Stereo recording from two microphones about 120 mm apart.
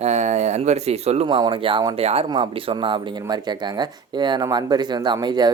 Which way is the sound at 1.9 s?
60° right (ahead or behind).